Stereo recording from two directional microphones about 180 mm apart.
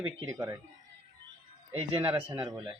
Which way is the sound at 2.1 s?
10° right (ahead or behind).